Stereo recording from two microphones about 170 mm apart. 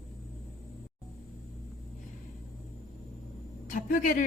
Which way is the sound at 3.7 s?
50° left (ahead or behind).